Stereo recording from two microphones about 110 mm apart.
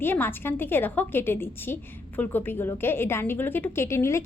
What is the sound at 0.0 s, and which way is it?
A woman's voice, 20° left (ahead or behind).